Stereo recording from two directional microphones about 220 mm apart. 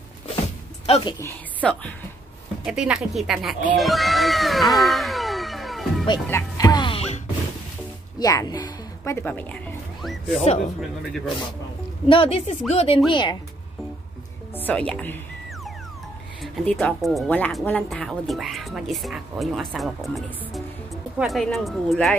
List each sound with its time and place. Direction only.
0.8 s a woman's voice: 30° left (ahead or behind)
1.2 s a woman's voice: 5° left (ahead or behind)
4.7 s music: centre (ahead or behind)
6.2 s music: 15° left (ahead or behind)
8.2 s a woman's voice: 15° left (ahead or behind)
12.1 s speech: 25° left (ahead or behind)
14.5 s a woman's voice: 5° left (ahead or behind)
16.5 s speech: centre (ahead or behind)